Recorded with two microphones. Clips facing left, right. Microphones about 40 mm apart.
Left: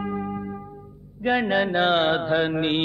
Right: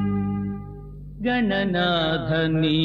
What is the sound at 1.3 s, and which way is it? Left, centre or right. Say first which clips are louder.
Music: left 1 dB; centre.